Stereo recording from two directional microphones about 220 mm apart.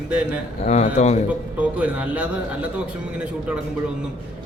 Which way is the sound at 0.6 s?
30° left (ahead or behind).